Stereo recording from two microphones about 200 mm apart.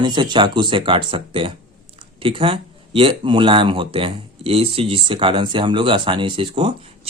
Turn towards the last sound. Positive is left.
turn(degrees=-25)  # may be behind; listen again after turning